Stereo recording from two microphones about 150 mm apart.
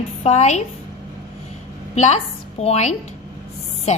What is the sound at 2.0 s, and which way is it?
A woman's voice, 50° left (ahead or behind).